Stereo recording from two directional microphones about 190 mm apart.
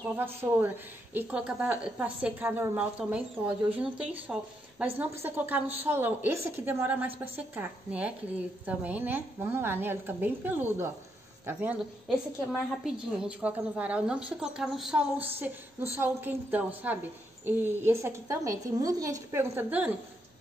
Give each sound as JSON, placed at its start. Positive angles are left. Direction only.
{"t": 0.0, "sound": "a woman's voice", "side_deg": -10}
{"t": 13.2, "sound": "a woman's voice", "side_deg": -5}